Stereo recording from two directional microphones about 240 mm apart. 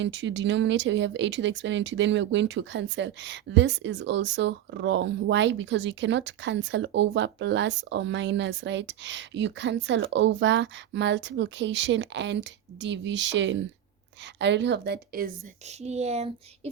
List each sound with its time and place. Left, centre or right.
0.0 s speech: right
15.8 s speech: right